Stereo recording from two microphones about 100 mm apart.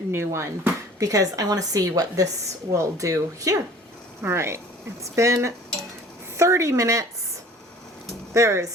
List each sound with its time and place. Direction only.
0.1 s speech: 25° right (ahead or behind)
8.3 s speech: 30° right (ahead or behind)